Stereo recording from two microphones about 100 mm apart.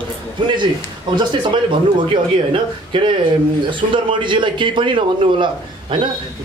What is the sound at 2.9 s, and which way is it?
A man's voice, 55° right (ahead or behind).